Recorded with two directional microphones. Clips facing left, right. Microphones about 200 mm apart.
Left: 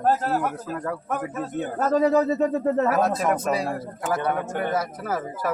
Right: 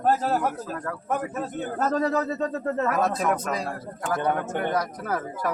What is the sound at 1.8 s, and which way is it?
Speech, 10° left (ahead or behind).